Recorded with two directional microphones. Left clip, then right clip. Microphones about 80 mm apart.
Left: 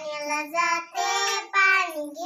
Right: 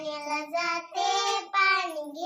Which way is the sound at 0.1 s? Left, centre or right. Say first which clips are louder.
Left 3 dB; right.